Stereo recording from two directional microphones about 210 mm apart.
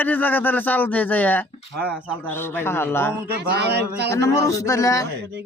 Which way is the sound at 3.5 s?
55° right (ahead or behind).